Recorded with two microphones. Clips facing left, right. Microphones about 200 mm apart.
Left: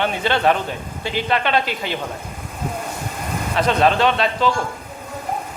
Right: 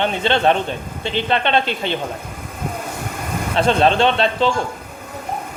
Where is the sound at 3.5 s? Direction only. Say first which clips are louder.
Right 2 dB; 30° right (ahead or behind).